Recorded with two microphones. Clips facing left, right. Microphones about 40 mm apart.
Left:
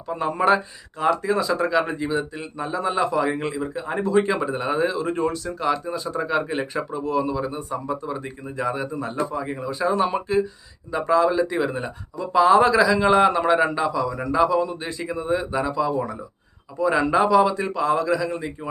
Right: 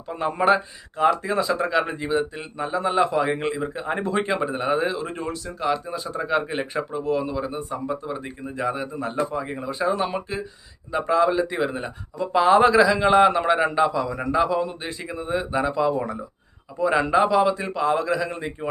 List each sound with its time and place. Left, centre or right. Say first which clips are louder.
0.1 s speech: even; centre
16.7 s a man's voice: even; centre